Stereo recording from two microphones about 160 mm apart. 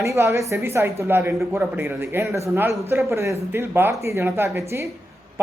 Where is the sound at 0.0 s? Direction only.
20° right (ahead or behind).